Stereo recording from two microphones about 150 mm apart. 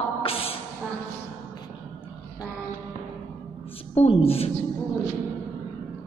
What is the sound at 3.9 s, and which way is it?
Speech, 40° left (ahead or behind).